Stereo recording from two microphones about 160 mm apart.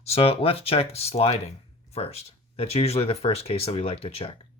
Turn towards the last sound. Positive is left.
turn(degrees=35)  # may be behind; listen again after turning